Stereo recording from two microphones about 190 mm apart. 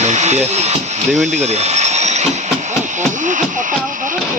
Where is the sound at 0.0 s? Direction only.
35° right (ahead or behind).